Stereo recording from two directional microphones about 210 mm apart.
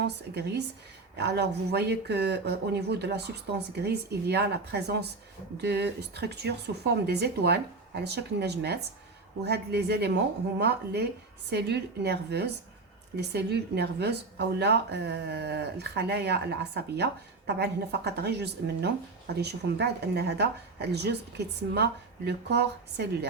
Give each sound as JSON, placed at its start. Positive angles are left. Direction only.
{"t": 0.0, "sound": "speech", "side_deg": -55}